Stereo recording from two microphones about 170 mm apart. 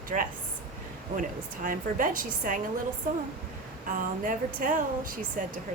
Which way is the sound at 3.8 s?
50° right (ahead or behind).